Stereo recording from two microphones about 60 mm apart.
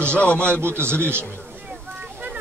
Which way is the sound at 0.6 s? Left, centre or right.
Right.